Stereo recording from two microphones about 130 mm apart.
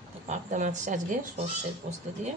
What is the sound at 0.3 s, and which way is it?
A woman's voice, 70° right (ahead or behind).